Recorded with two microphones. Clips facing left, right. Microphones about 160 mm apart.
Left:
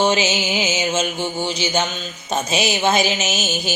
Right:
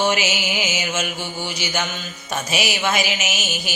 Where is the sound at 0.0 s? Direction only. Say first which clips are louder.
Left 3 dB; 20° left (ahead or behind).